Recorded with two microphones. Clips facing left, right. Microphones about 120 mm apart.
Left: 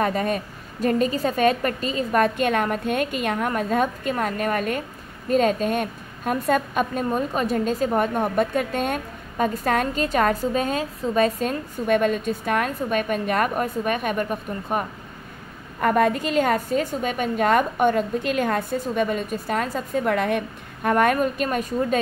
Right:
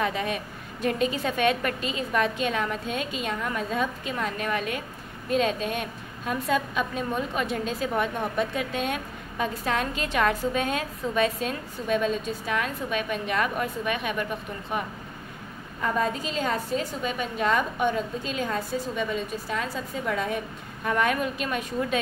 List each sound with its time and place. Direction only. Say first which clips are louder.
0.0 s a woman's voice: left 5 dB; 45° left (ahead or behind)
15.8 s a woman's voice: left 7 dB; 65° left (ahead or behind); by 21.7 s 45° left (ahead or behind)